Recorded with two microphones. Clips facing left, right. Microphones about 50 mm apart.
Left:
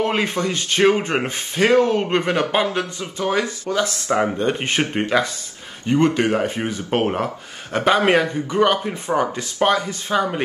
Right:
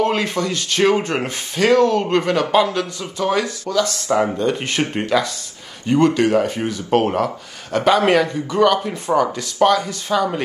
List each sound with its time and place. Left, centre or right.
0.0 s speech: centre
3.2 s speech: centre
3.7 s speech: left